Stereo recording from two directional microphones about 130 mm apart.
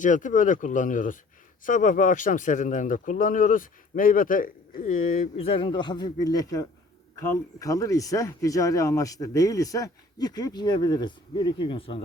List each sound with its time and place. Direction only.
0.0 s speech: 80° left
5.4 s speech: 45° left (ahead or behind)